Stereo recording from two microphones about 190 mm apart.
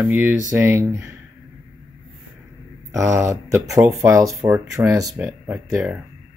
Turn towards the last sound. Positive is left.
turn(degrees=-10)  # may be behind; listen again after turning